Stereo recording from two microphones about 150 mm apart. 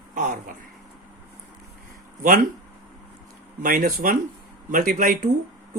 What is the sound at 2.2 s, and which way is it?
Speech, 70° right (ahead or behind).